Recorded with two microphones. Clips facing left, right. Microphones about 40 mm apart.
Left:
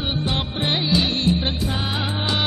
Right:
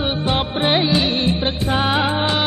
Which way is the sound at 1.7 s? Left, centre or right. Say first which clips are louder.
Right 8 dB; right.